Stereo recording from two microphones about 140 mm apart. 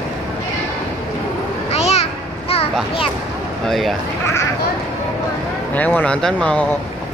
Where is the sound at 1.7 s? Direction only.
50° left (ahead or behind).